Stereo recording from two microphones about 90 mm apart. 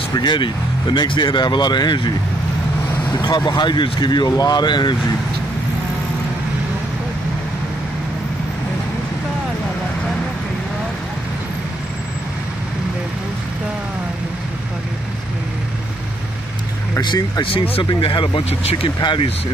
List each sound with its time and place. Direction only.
0.1 s speech: 55° left (ahead or behind)
17.0 s speech: 60° left (ahead or behind)
17.8 s speech: 65° left (ahead or behind)